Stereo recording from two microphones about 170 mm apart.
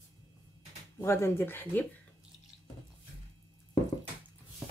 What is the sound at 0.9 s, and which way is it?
Speech, 15° left (ahead or behind).